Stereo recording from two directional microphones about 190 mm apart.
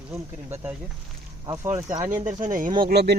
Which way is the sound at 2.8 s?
60° right (ahead or behind).